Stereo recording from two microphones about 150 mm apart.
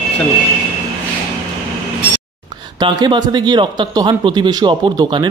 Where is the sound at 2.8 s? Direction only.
25° right (ahead or behind).